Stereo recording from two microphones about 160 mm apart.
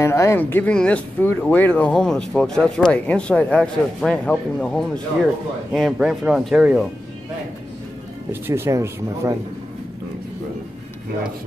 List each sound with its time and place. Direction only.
0.0 s speech: 15° left (ahead or behind); by 6.9 s 5° right (ahead or behind)
8.3 s speech: 15° right (ahead or behind)